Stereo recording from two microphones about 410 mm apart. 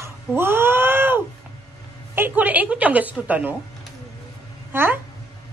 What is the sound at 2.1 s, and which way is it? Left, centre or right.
A woman's voice, centre.